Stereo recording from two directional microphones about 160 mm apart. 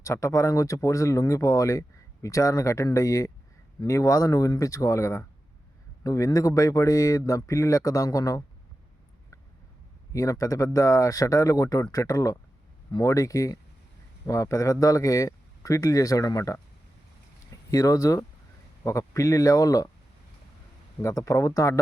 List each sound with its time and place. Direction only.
0.0 s speech: 20° left (ahead or behind)
10.1 s speech: 20° left (ahead or behind)
17.7 s speech: 20° left (ahead or behind)
21.0 s speech: 20° left (ahead or behind)